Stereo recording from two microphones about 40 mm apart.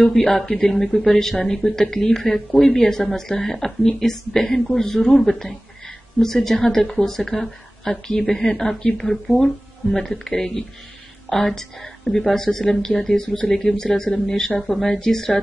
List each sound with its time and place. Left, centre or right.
0.1 s a woman's voice: centre